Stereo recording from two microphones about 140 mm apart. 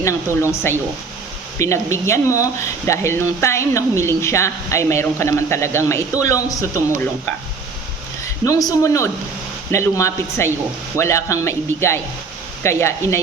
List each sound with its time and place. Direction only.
0.4 s speech: 15° left (ahead or behind)
8.4 s speech: 25° left (ahead or behind)